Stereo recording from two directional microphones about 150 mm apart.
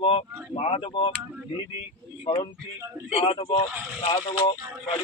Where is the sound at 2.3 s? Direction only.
35° left (ahead or behind).